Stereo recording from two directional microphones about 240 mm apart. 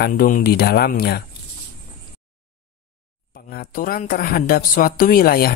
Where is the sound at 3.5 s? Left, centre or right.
Left.